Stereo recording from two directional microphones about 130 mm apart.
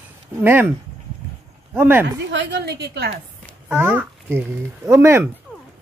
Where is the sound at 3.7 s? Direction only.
15° right (ahead or behind).